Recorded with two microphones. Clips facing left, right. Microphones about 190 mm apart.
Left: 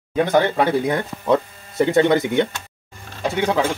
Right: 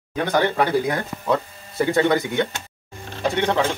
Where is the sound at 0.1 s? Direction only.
25° left (ahead or behind).